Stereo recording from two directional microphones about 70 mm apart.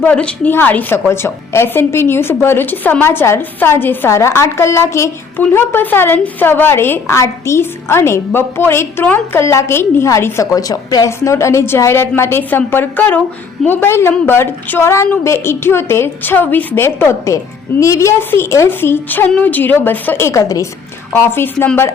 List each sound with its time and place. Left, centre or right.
0.0 s speech: centre
1.1 s a woman's voice: left
4.1 s a woman's voice: left
5.5 s a woman's voice: left
10.4 s a woman's voice: left
13.7 s a woman's voice: left
18.2 s a woman's voice: left
20.1 s a woman's voice: left
21.1 s a woman's voice: left